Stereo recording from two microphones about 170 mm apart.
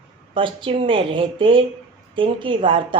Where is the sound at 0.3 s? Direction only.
30° right (ahead or behind).